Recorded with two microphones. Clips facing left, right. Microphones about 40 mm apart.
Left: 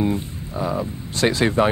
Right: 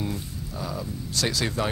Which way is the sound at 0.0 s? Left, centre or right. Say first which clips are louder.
Left 9 dB; left.